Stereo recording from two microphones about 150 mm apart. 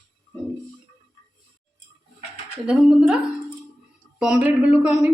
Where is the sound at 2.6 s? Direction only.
5° right (ahead or behind).